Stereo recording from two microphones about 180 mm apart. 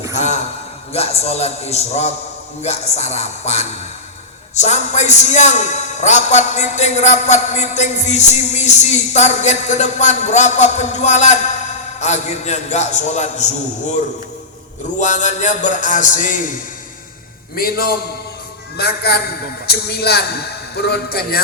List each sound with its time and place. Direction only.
0.2 s a sound: 40° left (ahead or behind)
0.9 s a man's voice: 35° left (ahead or behind)
14.9 s music: 45° left (ahead or behind)
17.5 s a man's voice: 55° left (ahead or behind)